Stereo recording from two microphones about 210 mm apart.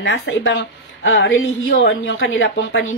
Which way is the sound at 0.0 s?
65° left (ahead or behind).